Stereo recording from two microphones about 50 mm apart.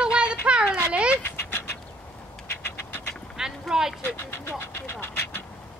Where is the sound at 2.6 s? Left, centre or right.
Left.